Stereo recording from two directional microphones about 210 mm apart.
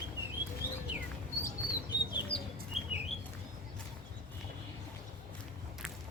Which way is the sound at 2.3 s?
5° left (ahead or behind).